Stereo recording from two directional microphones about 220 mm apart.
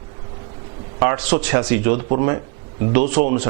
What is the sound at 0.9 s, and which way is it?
A man's voice, 15° right (ahead or behind).